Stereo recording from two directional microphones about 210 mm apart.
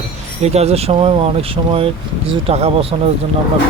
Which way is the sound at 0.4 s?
30° right (ahead or behind).